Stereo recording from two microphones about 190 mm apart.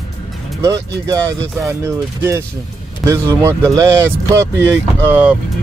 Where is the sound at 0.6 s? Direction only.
15° right (ahead or behind).